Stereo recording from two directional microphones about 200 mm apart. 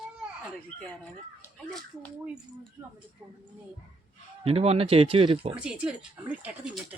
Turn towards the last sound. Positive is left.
turn(degrees=-5)  # may be behind; listen again after turning